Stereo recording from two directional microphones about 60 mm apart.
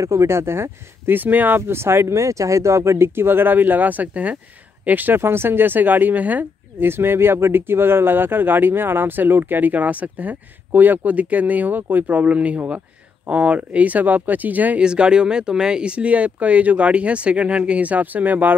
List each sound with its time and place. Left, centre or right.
0.0 s speech: right
6.9 s speech: right
14.8 s speech: centre